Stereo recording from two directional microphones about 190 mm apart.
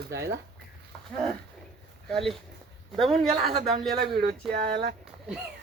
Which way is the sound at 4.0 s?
55° right (ahead or behind).